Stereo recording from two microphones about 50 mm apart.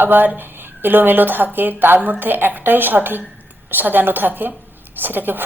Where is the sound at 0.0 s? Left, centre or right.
Right.